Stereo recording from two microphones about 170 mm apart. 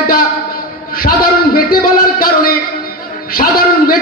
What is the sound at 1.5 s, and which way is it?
Speech, 60° left (ahead or behind).